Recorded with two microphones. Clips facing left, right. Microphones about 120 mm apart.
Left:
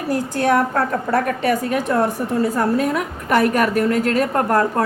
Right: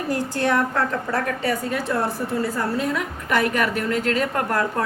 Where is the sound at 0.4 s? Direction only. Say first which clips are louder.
Left 4 dB; 45° left (ahead or behind).